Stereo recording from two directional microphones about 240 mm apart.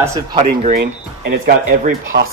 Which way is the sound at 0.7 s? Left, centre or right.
Right.